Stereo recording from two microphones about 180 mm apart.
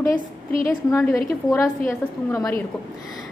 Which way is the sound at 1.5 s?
15° left (ahead or behind).